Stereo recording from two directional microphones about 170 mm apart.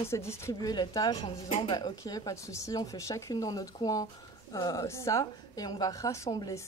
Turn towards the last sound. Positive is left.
turn(degrees=25)  # may be behind; listen again after turning